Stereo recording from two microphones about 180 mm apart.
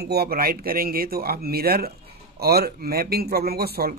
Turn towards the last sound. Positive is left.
turn(degrees=-60)  # may be behind; listen again after turning